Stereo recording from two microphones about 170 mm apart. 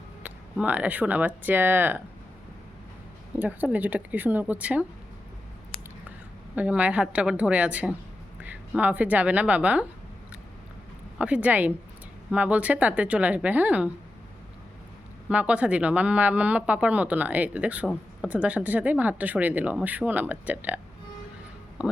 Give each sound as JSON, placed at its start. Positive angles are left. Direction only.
{"t": 0.6, "sound": "speech", "side_deg": -10}
{"t": 3.3, "sound": "speech", "side_deg": -10}
{"t": 6.6, "sound": "a woman's voice", "side_deg": -10}
{"t": 11.2, "sound": "speech", "side_deg": -10}
{"t": 15.3, "sound": "speech", "side_deg": -10}
{"t": 21.8, "sound": "speech", "side_deg": -5}